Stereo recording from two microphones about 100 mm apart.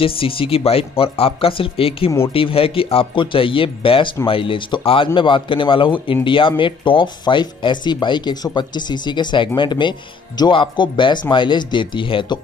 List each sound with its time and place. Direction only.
0.0 s a man's voice: 65° left (ahead or behind)